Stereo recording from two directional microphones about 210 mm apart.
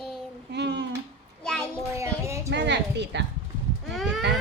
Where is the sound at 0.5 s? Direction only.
55° right (ahead or behind).